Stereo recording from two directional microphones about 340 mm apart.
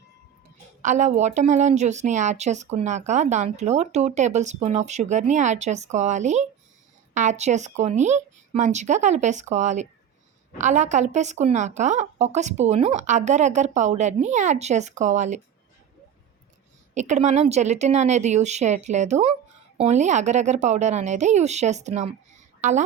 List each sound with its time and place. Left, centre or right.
0.8 s a woman's voice: right
16.9 s a woman's voice: right